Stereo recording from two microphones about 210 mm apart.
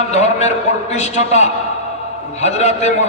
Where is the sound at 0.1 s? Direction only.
35° left (ahead or behind).